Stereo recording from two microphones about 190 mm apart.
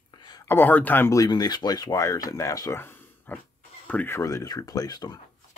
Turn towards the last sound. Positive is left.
turn(degrees=20)  # may be behind; listen again after turning